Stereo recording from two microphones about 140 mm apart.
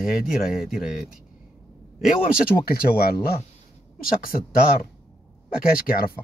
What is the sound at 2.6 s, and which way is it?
Speech, 90° left.